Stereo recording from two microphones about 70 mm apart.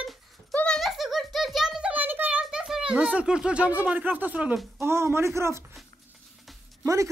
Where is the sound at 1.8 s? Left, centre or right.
Right.